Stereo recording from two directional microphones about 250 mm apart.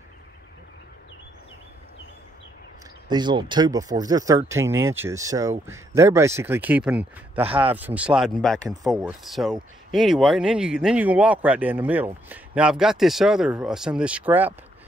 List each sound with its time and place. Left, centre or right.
3.1 s speech: centre
7.4 s speech: right
7.7 s speech: centre